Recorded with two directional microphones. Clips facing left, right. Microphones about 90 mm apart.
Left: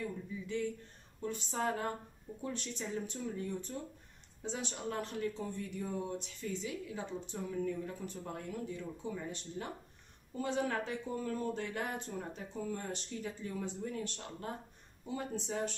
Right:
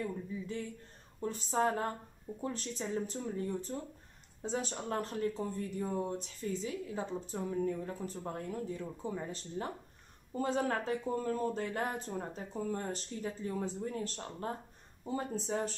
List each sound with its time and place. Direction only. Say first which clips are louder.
0.5 s speech: left 4 dB; 35° right (ahead or behind)